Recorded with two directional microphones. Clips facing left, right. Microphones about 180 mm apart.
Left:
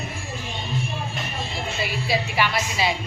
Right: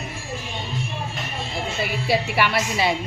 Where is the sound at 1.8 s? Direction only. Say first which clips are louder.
Right 3 dB; 60° right (ahead or behind).